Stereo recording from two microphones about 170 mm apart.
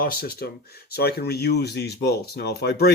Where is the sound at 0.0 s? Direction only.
60° left (ahead or behind).